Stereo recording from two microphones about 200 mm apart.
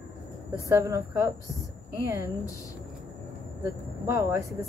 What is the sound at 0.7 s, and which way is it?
Speech, 15° right (ahead or behind).